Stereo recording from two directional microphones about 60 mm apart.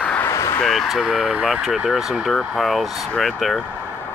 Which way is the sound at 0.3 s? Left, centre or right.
Left.